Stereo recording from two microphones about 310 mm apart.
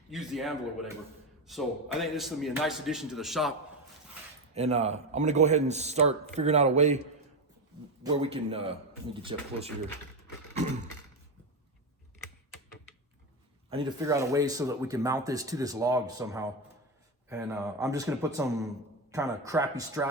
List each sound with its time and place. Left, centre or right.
0.1 s a man's voice: centre
4.5 s a man's voice: centre
8.0 s speech: centre
13.7 s speech: centre